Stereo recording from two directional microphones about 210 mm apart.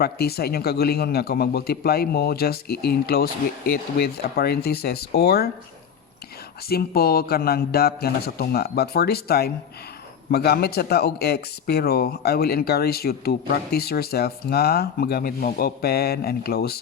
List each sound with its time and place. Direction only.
0.0 s speech: 50° left (ahead or behind)
6.7 s speech: 45° left (ahead or behind)